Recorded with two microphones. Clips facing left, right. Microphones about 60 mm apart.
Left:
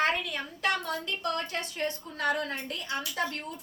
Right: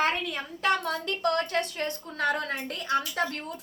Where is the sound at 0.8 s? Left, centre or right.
Right.